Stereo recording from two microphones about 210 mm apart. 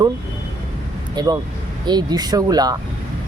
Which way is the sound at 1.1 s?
20° right (ahead or behind).